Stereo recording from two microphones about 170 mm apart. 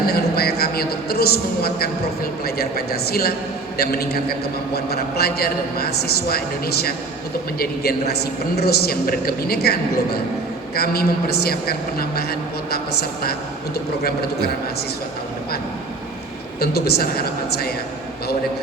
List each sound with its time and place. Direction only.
0.1 s a man's voice: 65° left (ahead or behind)
16.6 s a man's voice: 65° left (ahead or behind)